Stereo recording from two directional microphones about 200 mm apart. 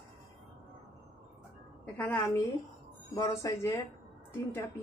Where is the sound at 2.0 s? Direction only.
10° left (ahead or behind).